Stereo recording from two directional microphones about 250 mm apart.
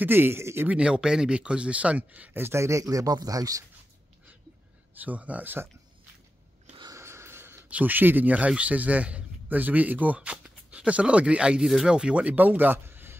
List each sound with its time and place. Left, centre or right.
0.0 s speech: centre
4.9 s speech: centre
6.7 s speech: centre